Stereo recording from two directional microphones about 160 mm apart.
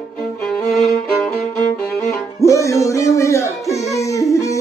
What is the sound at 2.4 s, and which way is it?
Music, 20° left (ahead or behind).